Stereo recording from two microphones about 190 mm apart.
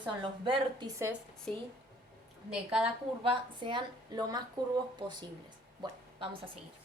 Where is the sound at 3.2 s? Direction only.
25° right (ahead or behind).